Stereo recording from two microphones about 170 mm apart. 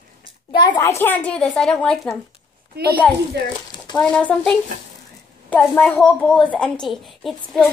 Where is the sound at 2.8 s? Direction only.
70° right (ahead or behind).